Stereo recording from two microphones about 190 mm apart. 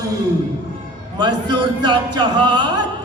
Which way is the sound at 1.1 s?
20° right (ahead or behind).